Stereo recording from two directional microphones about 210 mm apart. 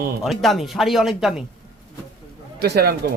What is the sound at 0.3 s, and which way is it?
Speech, centre (ahead or behind).